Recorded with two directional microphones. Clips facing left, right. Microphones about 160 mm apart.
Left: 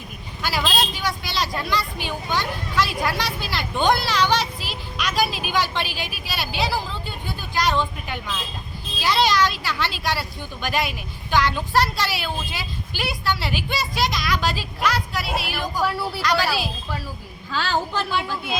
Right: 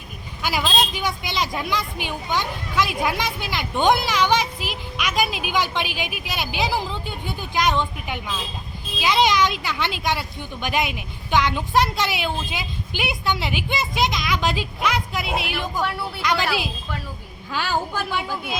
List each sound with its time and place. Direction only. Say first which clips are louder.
0.4 s a woman's voice: right 1 dB; 15° right (ahead or behind)
15.8 s speech: left 5 dB; 5° left (ahead or behind)
16.2 s a woman's voice: even; 20° right (ahead or behind)